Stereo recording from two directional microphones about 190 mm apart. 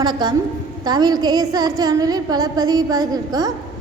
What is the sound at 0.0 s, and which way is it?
A woman's voice, 25° right (ahead or behind).